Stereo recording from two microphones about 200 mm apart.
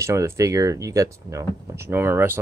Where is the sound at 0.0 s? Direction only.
15° right (ahead or behind).